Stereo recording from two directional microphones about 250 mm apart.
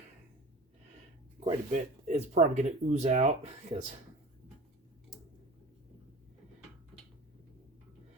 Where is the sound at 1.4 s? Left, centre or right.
Right.